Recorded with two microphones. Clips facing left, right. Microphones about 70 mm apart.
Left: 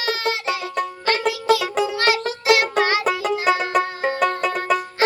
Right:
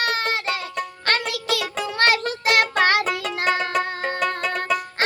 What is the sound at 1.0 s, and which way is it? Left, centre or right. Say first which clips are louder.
Music: left 5 dB; right.